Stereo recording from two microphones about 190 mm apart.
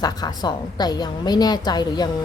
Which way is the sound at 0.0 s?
20° left (ahead or behind).